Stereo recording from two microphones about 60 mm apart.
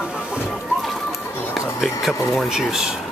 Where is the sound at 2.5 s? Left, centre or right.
Centre.